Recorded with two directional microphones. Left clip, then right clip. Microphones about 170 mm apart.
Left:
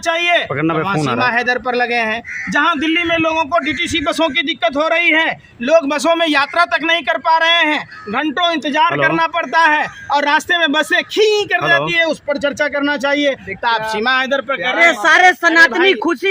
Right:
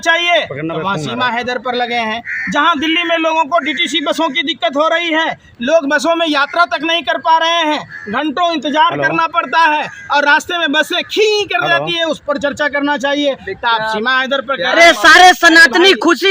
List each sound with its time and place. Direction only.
0.0 s speech: centre (ahead or behind)
0.6 s speech: 55° left (ahead or behind)
1.2 s speech: 10° left (ahead or behind)
14.8 s speech: 40° right (ahead or behind)